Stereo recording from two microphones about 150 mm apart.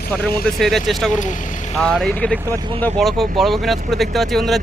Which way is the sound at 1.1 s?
55° left (ahead or behind).